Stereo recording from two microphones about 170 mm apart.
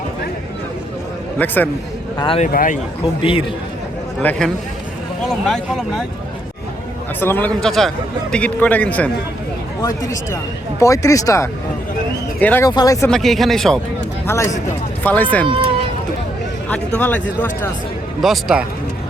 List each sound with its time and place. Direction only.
1.4 s a man's voice: 10° left (ahead or behind)
2.1 s speech: 30° left (ahead or behind)
2.4 s speech: 55° left (ahead or behind)
3.2 s a man's voice: 35° left (ahead or behind)
4.2 s a man's voice: 5° left (ahead or behind)
7.2 s a man's voice: 10° left (ahead or behind)
9.8 s speech: 20° left (ahead or behind)
12.6 s speech: 20° left (ahead or behind)
13.1 s speech: centre (ahead or behind)
14.3 s a man's voice: 15° left (ahead or behind)
16.6 s a man's voice: 5° left (ahead or behind)
18.2 s speech: centre (ahead or behind)